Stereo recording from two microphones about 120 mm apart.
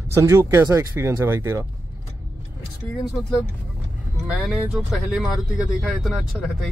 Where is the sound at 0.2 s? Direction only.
20° right (ahead or behind).